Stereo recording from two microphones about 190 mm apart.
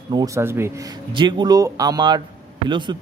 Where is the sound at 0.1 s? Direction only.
20° right (ahead or behind).